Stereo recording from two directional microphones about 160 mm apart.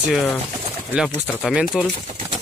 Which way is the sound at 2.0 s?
35° right (ahead or behind).